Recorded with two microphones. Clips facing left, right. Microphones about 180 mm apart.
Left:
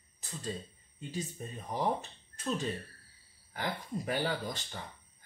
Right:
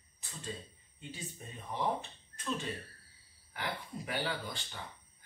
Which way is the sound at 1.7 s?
40° left (ahead or behind).